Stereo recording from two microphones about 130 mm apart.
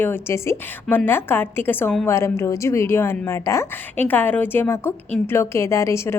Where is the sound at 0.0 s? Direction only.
15° left (ahead or behind).